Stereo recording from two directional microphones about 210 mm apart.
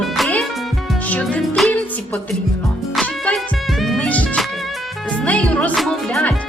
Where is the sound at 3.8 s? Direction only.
5° left (ahead or behind).